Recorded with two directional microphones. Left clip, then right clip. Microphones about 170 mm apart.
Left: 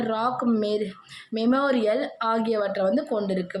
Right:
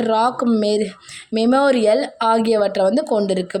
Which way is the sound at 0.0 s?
40° right (ahead or behind).